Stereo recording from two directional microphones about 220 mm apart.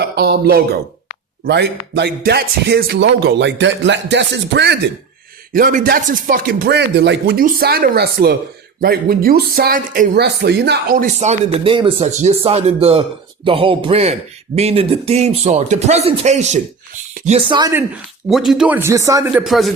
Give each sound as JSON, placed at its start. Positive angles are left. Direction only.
{"t": 0.0, "sound": "speech", "side_deg": -45}
{"t": 5.5, "sound": "speech", "side_deg": -40}
{"t": 18.3, "sound": "a man's voice", "side_deg": 0}